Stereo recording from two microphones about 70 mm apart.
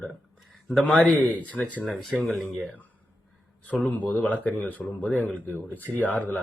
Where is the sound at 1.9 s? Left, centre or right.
Centre.